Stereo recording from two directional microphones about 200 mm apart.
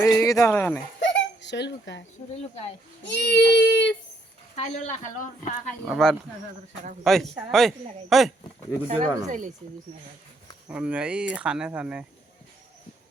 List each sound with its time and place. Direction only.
0.0 s speech: 15° left (ahead or behind)
0.9 s a sound: 60° left (ahead or behind)
3.0 s speech: 60° left (ahead or behind)
4.5 s speech: 35° left (ahead or behind)
5.9 s speech: centre (ahead or behind)
8.9 s speech: 30° right (ahead or behind)
10.7 s speech: 5° right (ahead or behind)